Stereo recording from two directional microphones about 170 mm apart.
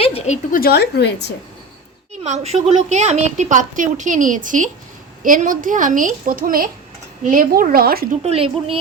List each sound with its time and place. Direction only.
0.0 s a sound: 35° left (ahead or behind)
0.5 s a woman's voice: 65° left (ahead or behind)
2.2 s a woman's voice: 40° right (ahead or behind); by 8.0 s 60° right (ahead or behind)
8.2 s speech: 35° right (ahead or behind)